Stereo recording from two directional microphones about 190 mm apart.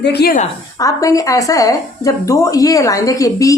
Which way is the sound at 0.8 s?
15° left (ahead or behind).